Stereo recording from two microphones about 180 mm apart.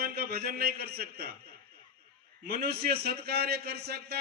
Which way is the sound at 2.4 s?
60° right (ahead or behind).